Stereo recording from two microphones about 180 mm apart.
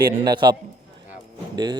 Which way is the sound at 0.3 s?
25° right (ahead or behind).